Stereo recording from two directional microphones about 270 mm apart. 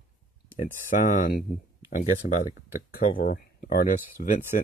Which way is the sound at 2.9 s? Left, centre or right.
Left.